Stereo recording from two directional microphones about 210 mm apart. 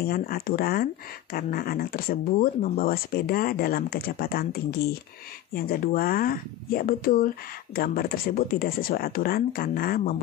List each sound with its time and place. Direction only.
0.0 s speech: 45° left (ahead or behind)